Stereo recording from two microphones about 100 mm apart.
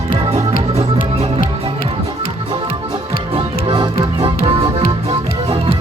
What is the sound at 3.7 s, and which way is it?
Music, 55° right (ahead or behind).